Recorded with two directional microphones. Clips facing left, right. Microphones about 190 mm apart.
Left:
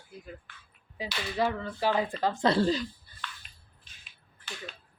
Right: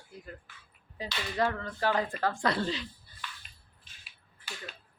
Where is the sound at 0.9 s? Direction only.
10° left (ahead or behind); by 2.8 s 35° left (ahead or behind).